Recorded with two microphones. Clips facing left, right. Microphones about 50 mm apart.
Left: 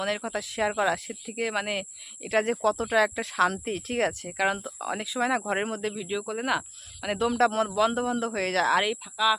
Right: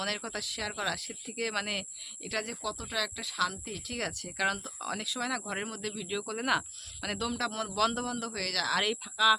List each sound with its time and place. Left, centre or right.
0.0 s speech: left
1.3 s speech: centre
2.3 s speech: left
5.9 s speech: centre
7.1 s speech: left
7.8 s speech: centre
8.0 s speech: left
8.8 s speech: centre